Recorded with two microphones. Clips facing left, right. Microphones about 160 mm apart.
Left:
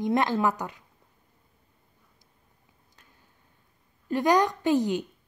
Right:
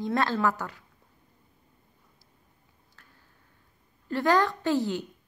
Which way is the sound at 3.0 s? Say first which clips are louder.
Right 1 dB; 20° left (ahead or behind).